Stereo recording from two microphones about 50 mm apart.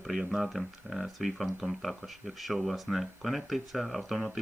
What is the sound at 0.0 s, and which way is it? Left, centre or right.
Speech, centre.